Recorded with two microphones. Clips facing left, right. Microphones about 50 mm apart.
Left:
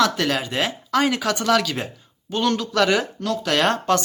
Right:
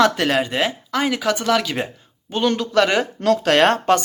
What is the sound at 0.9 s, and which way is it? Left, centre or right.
Speech, centre.